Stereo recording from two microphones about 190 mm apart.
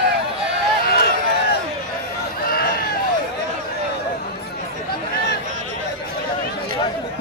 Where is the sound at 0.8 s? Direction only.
55° left (ahead or behind).